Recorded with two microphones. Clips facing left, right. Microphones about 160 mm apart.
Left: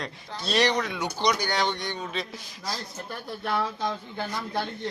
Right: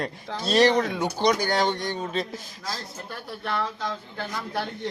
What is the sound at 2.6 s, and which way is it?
Speech, centre (ahead or behind).